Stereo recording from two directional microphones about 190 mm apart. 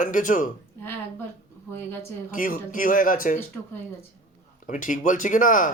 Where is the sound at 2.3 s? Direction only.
45° left (ahead or behind).